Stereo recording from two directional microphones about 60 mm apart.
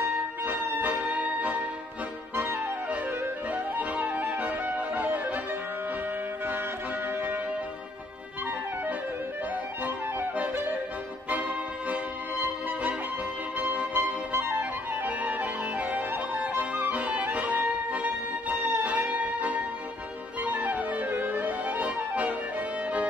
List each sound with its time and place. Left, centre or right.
0.1 s music: right
9.8 s music: right